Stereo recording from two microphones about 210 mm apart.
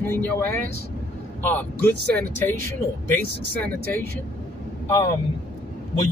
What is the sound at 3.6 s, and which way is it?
Speech, 10° left (ahead or behind).